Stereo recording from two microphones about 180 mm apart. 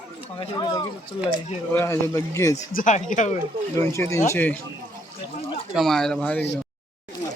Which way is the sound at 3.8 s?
15° left (ahead or behind).